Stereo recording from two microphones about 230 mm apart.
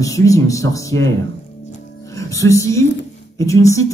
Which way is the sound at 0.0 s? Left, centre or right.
Centre.